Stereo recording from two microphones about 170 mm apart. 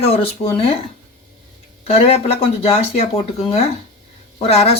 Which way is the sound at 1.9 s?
35° left (ahead or behind).